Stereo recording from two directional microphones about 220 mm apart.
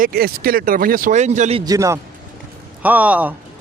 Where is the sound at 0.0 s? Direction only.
40° right (ahead or behind).